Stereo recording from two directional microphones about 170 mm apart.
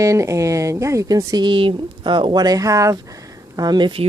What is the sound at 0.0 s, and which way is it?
Speech, 20° right (ahead or behind).